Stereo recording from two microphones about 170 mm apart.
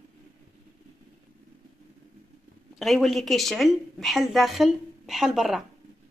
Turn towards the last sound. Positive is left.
turn(degrees=0)  # may be behind; listen again after turning